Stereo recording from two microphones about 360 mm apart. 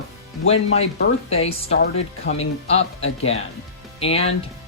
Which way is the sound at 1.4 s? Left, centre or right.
Centre.